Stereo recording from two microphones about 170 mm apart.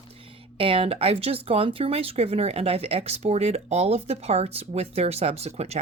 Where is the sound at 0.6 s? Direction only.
35° right (ahead or behind).